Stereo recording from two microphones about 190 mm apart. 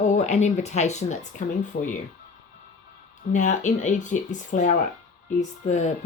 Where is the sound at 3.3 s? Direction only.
40° left (ahead or behind).